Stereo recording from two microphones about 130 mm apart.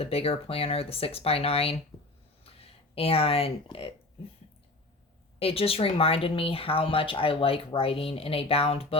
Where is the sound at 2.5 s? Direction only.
50° left (ahead or behind).